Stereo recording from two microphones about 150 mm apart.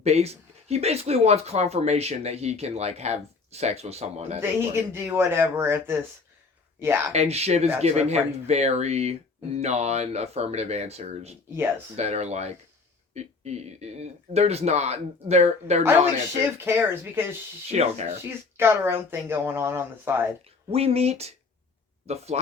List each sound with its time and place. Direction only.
0.0 s speech: 45° right (ahead or behind)
4.4 s speech: 15° right (ahead or behind)
7.1 s speech: 45° right (ahead or behind)
16.6 s speech: 15° right (ahead or behind)
17.7 s speech: 45° right (ahead or behind)
18.2 s speech: 15° right (ahead or behind)
20.7 s speech: 40° right (ahead or behind)